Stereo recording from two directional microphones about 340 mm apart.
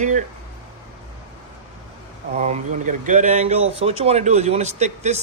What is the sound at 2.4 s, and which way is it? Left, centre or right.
Speech, centre.